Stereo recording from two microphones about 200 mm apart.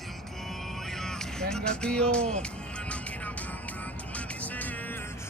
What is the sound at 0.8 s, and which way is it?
Music, 5° left (ahead or behind).